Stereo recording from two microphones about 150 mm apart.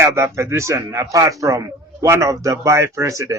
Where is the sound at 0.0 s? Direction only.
15° right (ahead or behind).